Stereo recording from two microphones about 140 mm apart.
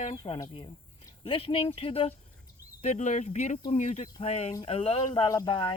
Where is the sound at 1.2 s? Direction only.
40° left (ahead or behind).